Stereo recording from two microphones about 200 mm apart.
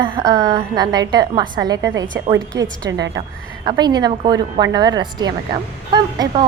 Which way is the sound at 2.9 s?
65° right (ahead or behind).